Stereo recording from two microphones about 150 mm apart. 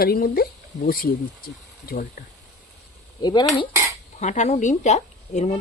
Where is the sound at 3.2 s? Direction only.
30° left (ahead or behind).